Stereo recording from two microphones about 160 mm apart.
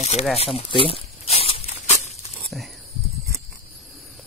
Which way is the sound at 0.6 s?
35° left (ahead or behind).